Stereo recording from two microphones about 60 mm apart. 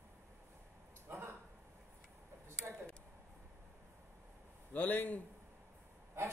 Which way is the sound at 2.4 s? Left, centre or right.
Right.